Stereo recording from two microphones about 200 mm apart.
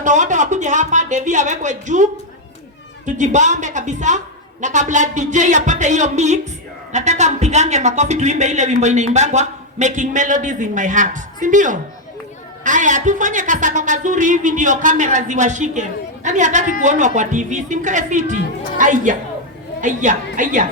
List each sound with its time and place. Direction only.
0.0 s speech: 40° right (ahead or behind)
3.1 s speech: 35° right (ahead or behind)